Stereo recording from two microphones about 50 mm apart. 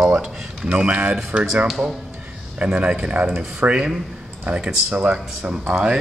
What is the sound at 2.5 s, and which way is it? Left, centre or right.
Speech, right.